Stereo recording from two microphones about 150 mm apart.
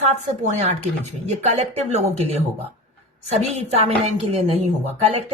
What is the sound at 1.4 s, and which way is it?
A woman's voice, 50° right (ahead or behind).